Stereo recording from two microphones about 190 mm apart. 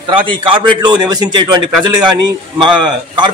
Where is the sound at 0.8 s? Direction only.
20° right (ahead or behind).